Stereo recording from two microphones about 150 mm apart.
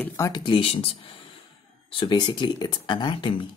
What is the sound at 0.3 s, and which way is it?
Speech, 35° left (ahead or behind).